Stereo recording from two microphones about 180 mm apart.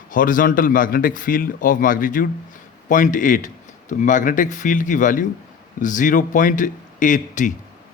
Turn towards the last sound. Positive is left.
turn(degrees=45)  # may be behind; listen again after turning